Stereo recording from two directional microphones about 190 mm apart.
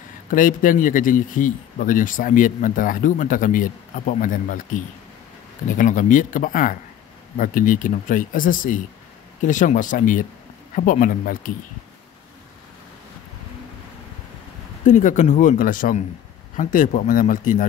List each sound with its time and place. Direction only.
0.3 s a man's voice: 45° left (ahead or behind)
14.9 s a man's voice: 40° left (ahead or behind)